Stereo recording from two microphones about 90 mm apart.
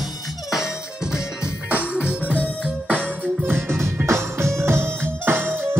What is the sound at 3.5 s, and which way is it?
Music, 25° right (ahead or behind).